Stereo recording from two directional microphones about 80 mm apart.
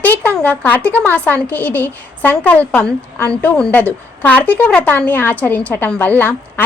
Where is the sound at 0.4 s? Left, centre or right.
Left.